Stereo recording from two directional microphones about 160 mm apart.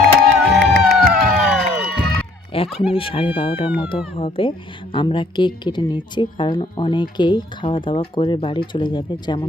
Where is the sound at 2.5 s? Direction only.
35° left (ahead or behind).